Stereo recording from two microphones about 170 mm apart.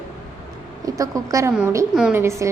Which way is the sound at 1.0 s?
20° right (ahead or behind).